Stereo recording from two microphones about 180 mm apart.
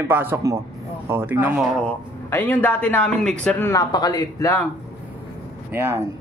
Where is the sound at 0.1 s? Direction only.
10° right (ahead or behind).